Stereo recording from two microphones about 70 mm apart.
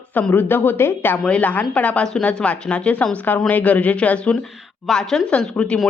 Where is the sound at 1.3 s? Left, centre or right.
Left.